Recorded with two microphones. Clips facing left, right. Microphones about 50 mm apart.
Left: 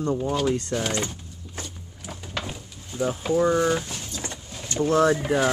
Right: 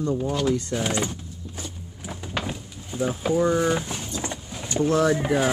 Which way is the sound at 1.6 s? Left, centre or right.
Centre.